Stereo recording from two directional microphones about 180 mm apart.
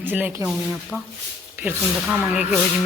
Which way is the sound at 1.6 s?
10° right (ahead or behind).